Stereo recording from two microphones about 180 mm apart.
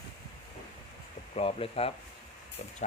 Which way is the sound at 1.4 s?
35° left (ahead or behind).